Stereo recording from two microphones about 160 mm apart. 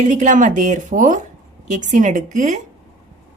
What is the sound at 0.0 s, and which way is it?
A woman's voice, 50° right (ahead or behind).